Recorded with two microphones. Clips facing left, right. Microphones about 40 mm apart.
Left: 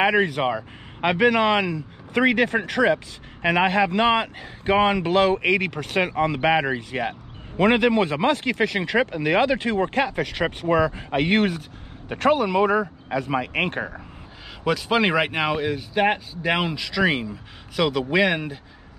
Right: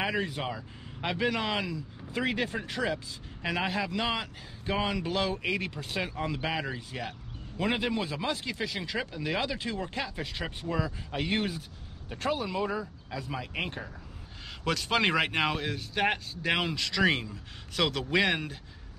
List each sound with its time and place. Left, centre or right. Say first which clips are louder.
0.0 s speech: left 11 dB; left
14.6 s speech: left 7 dB; centre